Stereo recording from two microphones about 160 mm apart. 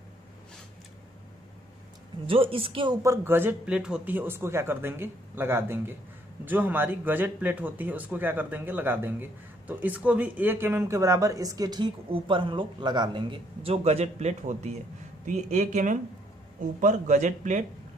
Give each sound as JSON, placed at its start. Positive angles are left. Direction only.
{"t": 2.2, "sound": "speech", "side_deg": -35}
{"t": 3.0, "sound": "a man's voice", "side_deg": -15}